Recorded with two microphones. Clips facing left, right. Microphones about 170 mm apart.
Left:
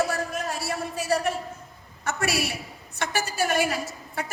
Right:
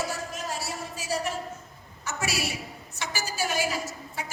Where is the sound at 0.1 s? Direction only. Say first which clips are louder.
Left 5 dB; 60° left (ahead or behind).